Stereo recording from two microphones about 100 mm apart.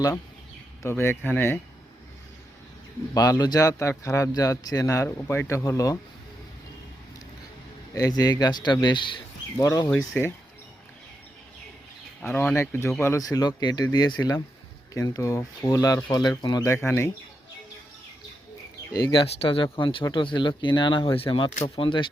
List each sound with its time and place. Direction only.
0.8 s speech: 25° left (ahead or behind)
3.2 s speech: 40° left (ahead or behind)
5.0 s speech: 25° left (ahead or behind)
7.9 s speech: 40° left (ahead or behind)
9.6 s speech: 35° left (ahead or behind)
9.9 s speech: 20° left (ahead or behind)
12.2 s speech: 25° left (ahead or behind)
16.0 s speech: 50° left (ahead or behind)
16.6 s speech: 25° left (ahead or behind)
18.9 s speech: 45° left (ahead or behind)
19.2 s speech: 60° left (ahead or behind)